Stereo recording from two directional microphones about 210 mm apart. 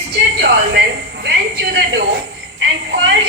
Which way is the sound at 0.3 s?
50° right (ahead or behind).